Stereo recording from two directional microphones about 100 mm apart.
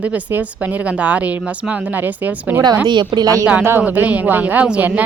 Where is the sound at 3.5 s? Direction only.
20° right (ahead or behind).